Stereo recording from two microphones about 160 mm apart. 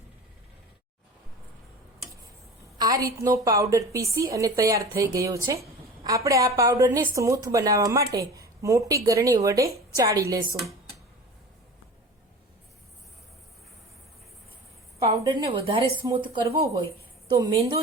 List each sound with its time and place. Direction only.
2.7 s a woman's voice: 25° right (ahead or behind)
14.9 s a woman's voice: 20° right (ahead or behind)
16.0 s a woman's voice: 20° right (ahead or behind)
17.2 s a woman's voice: 25° right (ahead or behind)